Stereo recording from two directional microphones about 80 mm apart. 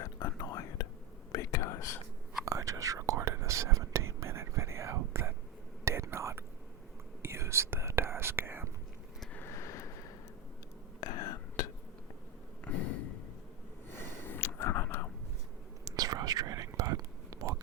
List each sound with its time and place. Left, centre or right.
0.2 s whispering: left
2.4 s whispering: right
9.3 s vehicle: left
11.2 s whispering: left
12.6 s a sound: centre
13.9 s a sound: left
15.8 s whispering: right